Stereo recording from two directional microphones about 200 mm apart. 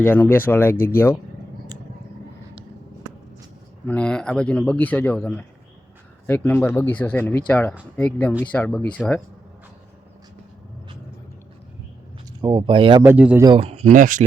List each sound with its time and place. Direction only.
0.0 s speech: 10° left (ahead or behind)
3.8 s speech: 5° left (ahead or behind)
12.4 s speech: 20° right (ahead or behind)
13.0 s speech: 10° right (ahead or behind)
13.4 s speech: 25° right (ahead or behind)
13.9 s speech: 40° right (ahead or behind)